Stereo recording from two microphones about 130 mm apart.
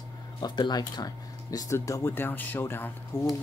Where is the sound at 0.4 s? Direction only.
35° left (ahead or behind).